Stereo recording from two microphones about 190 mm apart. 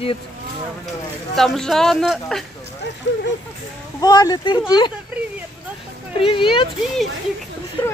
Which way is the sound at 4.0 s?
20° left (ahead or behind).